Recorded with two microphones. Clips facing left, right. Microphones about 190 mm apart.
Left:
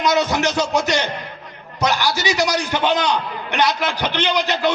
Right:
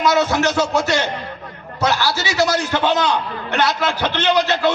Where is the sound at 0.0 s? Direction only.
20° left (ahead or behind).